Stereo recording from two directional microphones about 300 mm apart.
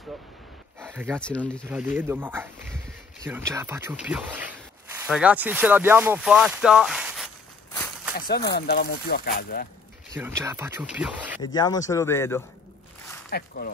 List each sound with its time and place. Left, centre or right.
0.7 s a sound: centre
1.2 s speech: centre
8.2 s speech: left
10.1 s speech: centre
11.4 s speech: centre
13.3 s speech: left